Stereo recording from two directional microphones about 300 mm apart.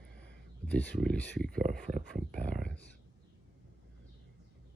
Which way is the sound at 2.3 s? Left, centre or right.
Centre.